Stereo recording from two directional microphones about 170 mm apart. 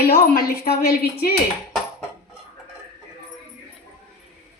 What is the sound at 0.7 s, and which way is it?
Speech, 65° left (ahead or behind).